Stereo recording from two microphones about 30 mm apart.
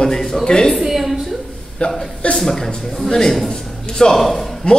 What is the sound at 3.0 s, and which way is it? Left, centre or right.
A man's voice, centre.